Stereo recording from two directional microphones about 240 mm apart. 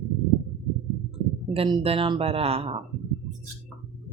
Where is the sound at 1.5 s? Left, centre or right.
Right.